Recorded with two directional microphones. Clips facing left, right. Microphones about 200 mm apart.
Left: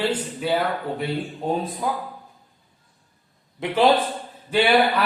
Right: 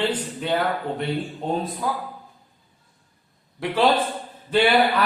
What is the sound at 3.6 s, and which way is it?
Speech, 20° left (ahead or behind).